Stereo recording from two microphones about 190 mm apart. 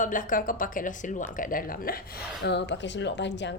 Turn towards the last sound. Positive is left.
turn(degrees=65)  # may be behind; listen again after turning